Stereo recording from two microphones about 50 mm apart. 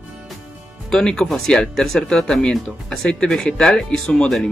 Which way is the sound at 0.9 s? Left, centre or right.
Centre.